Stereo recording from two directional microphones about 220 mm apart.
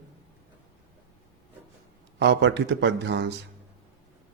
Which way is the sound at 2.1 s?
55° right (ahead or behind).